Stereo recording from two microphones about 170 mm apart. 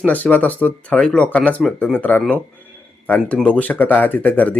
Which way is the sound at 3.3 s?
5° left (ahead or behind).